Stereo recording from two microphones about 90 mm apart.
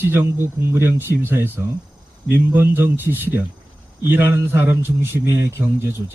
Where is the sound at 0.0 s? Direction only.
25° right (ahead or behind).